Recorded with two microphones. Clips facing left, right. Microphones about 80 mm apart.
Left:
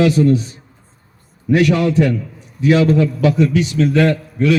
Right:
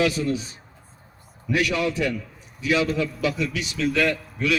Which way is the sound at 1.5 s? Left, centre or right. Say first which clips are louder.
Left 9 dB; left.